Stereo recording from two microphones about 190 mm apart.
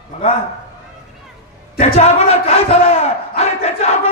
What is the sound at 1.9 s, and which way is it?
Speech, 35° left (ahead or behind).